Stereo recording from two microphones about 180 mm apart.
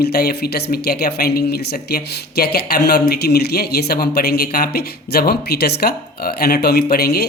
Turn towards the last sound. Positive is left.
turn(degrees=60)  # may be behind; listen again after turning